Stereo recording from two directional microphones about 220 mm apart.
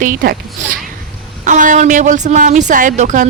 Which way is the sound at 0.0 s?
40° right (ahead or behind).